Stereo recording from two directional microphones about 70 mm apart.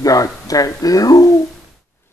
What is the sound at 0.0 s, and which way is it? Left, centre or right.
Speech, left.